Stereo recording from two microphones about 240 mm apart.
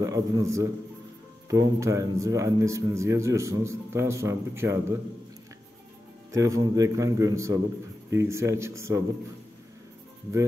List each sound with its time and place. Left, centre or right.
0.0 s a man's voice: centre
6.3 s a man's voice: centre